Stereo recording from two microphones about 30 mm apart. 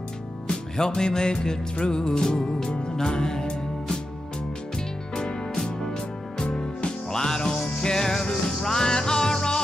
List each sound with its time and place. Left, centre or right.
0.5 s music: left
5.6 s music: centre
6.4 s music: left
7.1 s music: left